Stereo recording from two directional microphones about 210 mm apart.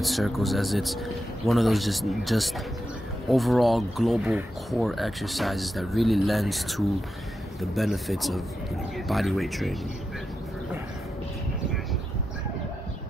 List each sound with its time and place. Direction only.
0.0 s speech: centre (ahead or behind)